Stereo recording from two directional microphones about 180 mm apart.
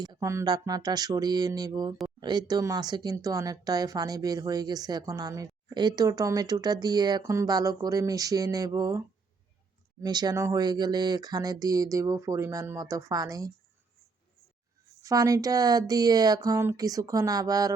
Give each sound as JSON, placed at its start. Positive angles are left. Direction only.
{"t": 0.0, "sound": "speech", "side_deg": -20}
{"t": 15.0, "sound": "speech", "side_deg": -20}